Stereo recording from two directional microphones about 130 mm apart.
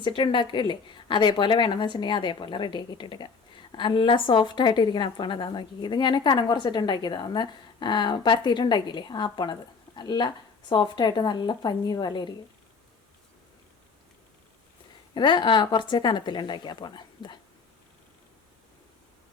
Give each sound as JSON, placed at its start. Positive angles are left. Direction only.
{"t": 0.0, "sound": "a woman's voice", "side_deg": 40}
{"t": 15.1, "sound": "a woman's voice", "side_deg": 35}